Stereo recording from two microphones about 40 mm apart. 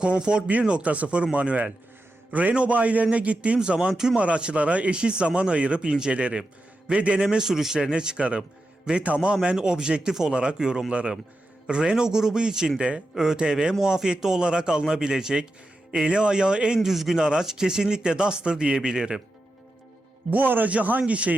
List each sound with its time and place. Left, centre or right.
0.0 s speech: right
3.6 s speech: right
7.9 s speech: right
16.8 s a man's voice: centre
17.2 s speech: centre
20.3 s speech: right
20.7 s speech: right